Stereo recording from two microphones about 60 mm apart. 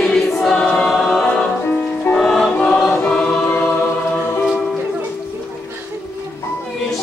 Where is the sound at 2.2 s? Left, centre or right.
Centre.